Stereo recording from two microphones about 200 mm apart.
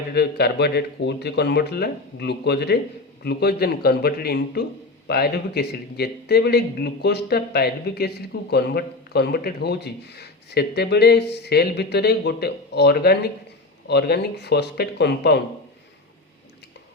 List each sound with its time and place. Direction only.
0.1 s a man's voice: 55° left (ahead or behind)